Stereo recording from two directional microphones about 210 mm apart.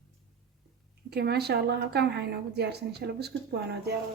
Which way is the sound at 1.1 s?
50° right (ahead or behind).